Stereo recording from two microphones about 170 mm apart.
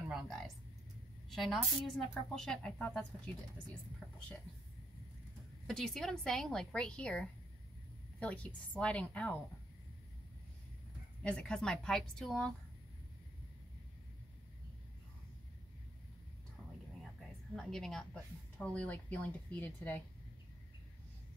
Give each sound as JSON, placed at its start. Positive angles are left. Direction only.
{"t": 0.1, "sound": "music", "side_deg": 5}
{"t": 1.3, "sound": "a woman's voice", "side_deg": 0}
{"t": 5.7, "sound": "a woman's voice", "side_deg": 0}
{"t": 11.2, "sound": "a woman's voice", "side_deg": 5}
{"t": 17.6, "sound": "speech", "side_deg": 0}